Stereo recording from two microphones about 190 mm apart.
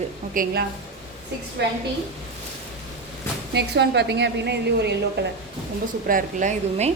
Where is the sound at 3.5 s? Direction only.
65° right (ahead or behind).